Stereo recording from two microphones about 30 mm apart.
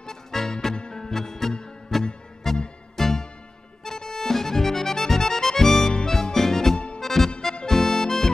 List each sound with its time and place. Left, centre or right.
0.0 s music: centre
0.7 s music: left
1.0 s music: centre